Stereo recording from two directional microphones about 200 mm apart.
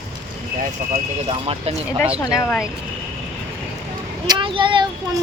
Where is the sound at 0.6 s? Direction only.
35° right (ahead or behind).